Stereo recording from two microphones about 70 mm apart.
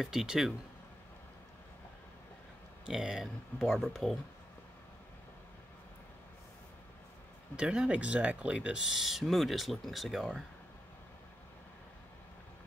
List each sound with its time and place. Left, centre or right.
0.0 s speech: centre
2.9 s ratchet: centre
7.5 s speech: centre
8.9 s ratchet: centre